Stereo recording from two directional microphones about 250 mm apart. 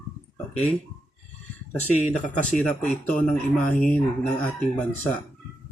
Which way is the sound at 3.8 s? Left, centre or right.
Left.